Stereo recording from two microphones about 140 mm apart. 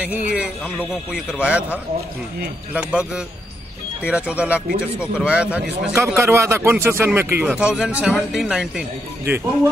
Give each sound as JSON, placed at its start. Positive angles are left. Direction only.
{"t": 0.0, "sound": "speech", "side_deg": -10}
{"t": 5.9, "sound": "speech", "side_deg": -20}